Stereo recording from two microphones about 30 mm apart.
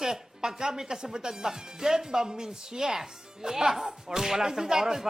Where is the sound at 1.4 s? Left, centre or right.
Centre.